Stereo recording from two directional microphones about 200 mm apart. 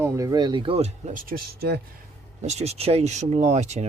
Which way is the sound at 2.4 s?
35° right (ahead or behind).